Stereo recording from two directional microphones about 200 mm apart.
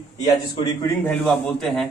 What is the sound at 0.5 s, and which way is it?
Speech, 20° left (ahead or behind).